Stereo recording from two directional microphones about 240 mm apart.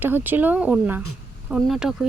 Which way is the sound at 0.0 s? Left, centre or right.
Centre.